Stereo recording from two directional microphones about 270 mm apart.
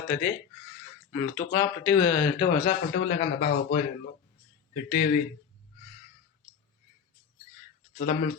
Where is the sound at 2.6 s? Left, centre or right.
Left.